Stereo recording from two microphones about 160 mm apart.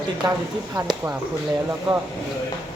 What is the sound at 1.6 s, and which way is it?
Speech, 15° right (ahead or behind).